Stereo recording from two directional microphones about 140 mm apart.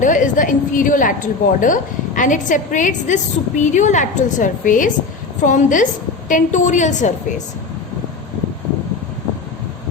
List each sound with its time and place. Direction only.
0.0 s a woman's voice: 65° left (ahead or behind)